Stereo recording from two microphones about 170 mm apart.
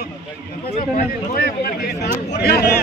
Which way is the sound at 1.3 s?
55° left (ahead or behind).